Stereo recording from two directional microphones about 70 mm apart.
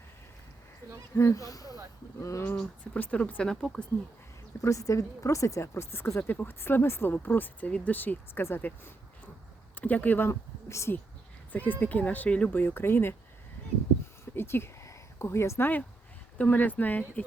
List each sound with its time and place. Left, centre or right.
1.1 s speech: left
2.6 s speech: centre
4.6 s a woman's voice: left
5.6 s speech: left
11.5 s speech: left
14.3 s speech: left